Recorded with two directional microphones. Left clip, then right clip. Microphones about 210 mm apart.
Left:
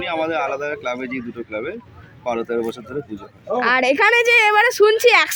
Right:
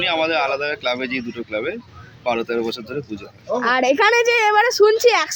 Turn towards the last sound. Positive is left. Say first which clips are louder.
# left 1 dB
turn(degrees=5)  # may be behind; listen again after turning